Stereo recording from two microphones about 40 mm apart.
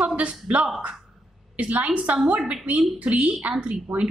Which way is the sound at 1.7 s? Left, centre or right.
Right.